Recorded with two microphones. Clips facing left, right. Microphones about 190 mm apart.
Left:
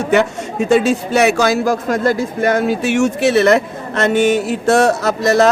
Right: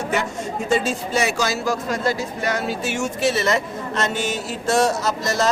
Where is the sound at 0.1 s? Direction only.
75° left (ahead or behind).